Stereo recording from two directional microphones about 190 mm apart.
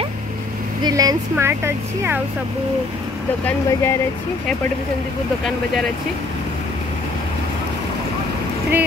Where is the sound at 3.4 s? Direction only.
15° left (ahead or behind).